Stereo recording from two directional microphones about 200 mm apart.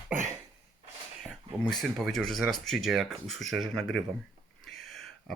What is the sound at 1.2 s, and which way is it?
Speech, 5° left (ahead or behind).